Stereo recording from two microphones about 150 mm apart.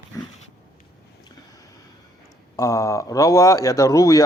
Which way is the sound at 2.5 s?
20° left (ahead or behind).